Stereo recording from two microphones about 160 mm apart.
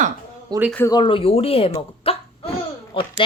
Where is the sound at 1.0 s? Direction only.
35° left (ahead or behind).